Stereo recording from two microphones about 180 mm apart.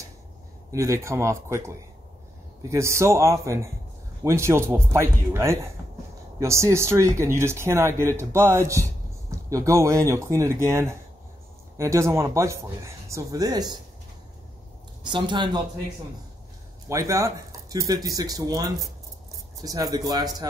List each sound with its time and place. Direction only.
0.7 s speech: 15° right (ahead or behind)
15.0 s speech: 25° right (ahead or behind)
16.9 s speech: 15° right (ahead or behind)